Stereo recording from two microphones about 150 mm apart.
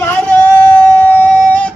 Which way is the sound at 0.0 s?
10° left (ahead or behind).